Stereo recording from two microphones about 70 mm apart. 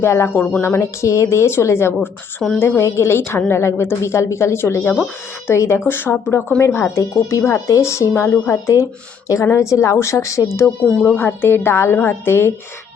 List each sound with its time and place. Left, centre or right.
0.0 s a woman's voice: left
11.0 s a woman's voice: left